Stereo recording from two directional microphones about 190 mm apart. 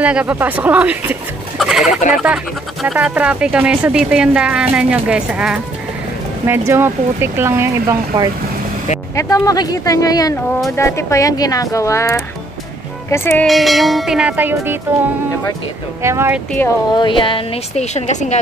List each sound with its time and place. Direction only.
0.0 s speech: 5° right (ahead or behind)
1.6 s chicken: centre (ahead or behind)
1.9 s speech: 40° left (ahead or behind)
2.2 s speech: 5° right (ahead or behind)
9.1 s speech: 15° left (ahead or behind)
13.5 s speech: centre (ahead or behind)
16.0 s speech: 15° right (ahead or behind)
16.5 s speech: 20° left (ahead or behind); by 18.4 s 35° left (ahead or behind)